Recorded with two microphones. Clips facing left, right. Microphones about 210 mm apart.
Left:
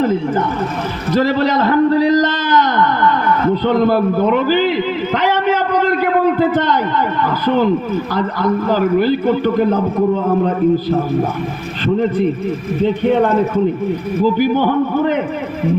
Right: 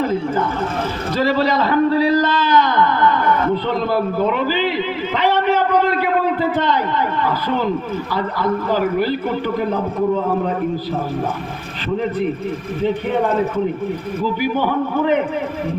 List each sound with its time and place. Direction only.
1.2 s a man's voice: 45° left (ahead or behind)